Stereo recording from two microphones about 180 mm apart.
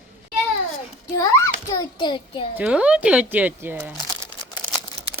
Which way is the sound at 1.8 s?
25° left (ahead or behind).